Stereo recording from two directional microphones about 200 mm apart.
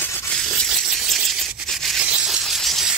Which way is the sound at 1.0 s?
Centre (ahead or behind).